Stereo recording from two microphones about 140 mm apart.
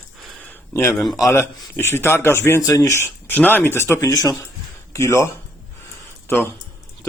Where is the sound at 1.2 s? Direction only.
20° left (ahead or behind).